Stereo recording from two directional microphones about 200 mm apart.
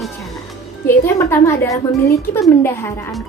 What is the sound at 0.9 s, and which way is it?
A woman's voice, 15° left (ahead or behind).